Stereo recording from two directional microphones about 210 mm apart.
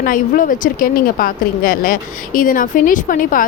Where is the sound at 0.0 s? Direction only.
40° left (ahead or behind).